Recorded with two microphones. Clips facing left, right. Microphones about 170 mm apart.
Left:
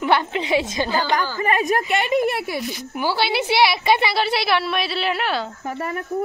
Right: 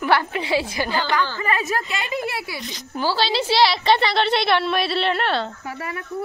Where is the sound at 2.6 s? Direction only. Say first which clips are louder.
Left 1 dB; 10° left (ahead or behind).